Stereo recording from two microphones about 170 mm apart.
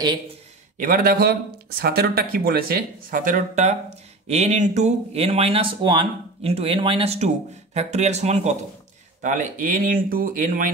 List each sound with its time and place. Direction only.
0.7 s speech: 55° right (ahead or behind)